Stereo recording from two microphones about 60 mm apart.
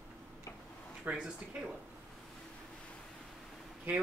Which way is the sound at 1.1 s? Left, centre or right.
Right.